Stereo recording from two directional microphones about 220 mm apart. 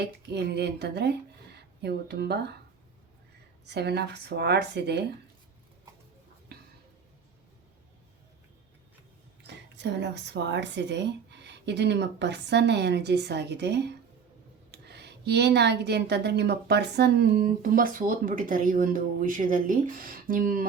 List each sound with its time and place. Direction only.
0.0 s speech: 50° right (ahead or behind)
3.7 s speech: 50° right (ahead or behind)
9.4 s speech: 50° right (ahead or behind)